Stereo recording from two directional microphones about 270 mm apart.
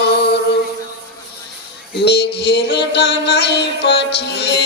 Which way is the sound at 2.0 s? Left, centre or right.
Left.